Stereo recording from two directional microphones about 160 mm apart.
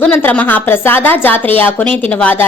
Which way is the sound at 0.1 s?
10° left (ahead or behind).